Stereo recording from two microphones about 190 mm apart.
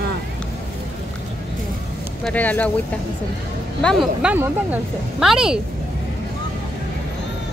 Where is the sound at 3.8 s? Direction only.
5° right (ahead or behind).